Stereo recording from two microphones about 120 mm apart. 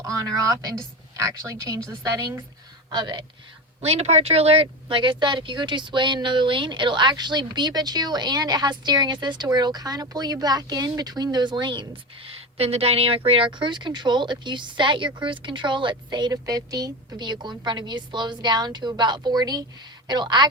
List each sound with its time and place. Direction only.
0.0 s speech: 30° right (ahead or behind)
3.8 s speech: 60° right (ahead or behind); by 20.5 s 35° right (ahead or behind)